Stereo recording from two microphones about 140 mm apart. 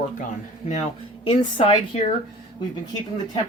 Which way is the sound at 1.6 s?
45° left (ahead or behind).